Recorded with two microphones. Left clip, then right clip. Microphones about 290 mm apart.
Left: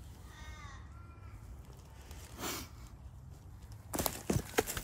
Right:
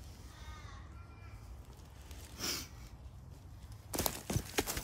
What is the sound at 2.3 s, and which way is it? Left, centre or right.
Sniff, centre.